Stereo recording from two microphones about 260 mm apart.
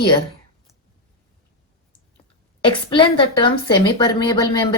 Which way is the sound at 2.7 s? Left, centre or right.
Centre.